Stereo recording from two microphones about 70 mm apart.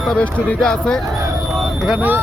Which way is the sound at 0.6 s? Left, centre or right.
Centre.